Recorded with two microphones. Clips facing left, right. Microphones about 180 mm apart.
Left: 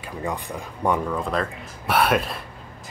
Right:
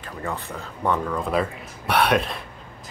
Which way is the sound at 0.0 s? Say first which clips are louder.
Left 2 dB; 15° left (ahead or behind).